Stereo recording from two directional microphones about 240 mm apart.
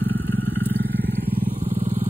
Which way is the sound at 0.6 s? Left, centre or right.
Centre.